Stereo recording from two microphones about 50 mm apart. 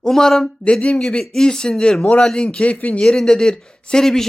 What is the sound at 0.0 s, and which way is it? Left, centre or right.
Speech, centre.